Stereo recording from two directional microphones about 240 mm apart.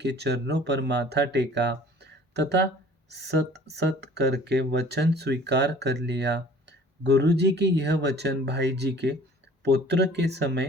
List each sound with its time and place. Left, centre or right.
0.0 s speech: right